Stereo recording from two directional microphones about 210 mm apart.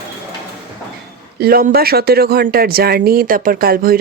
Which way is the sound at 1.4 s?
45° right (ahead or behind).